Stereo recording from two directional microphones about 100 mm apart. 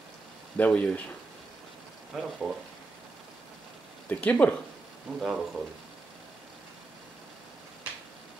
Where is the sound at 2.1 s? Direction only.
5° right (ahead or behind).